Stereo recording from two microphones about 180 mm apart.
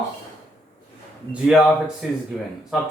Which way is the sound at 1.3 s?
5° right (ahead or behind).